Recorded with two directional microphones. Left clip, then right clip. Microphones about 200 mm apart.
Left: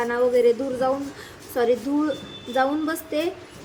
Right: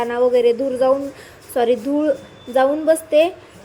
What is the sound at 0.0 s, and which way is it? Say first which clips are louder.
A woman's voice: right 4 dB; 10° right (ahead or behind).